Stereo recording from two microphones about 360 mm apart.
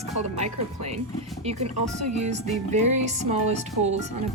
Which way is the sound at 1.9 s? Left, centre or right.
Right.